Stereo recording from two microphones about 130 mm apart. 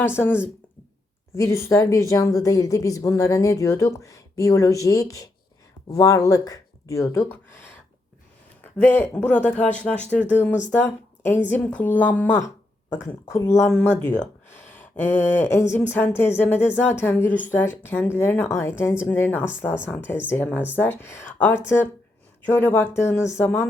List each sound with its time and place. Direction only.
0.0 s speech: 15° left (ahead or behind)
1.4 s a woman's voice: 20° left (ahead or behind)
8.6 s a woman's voice: 15° left (ahead or behind)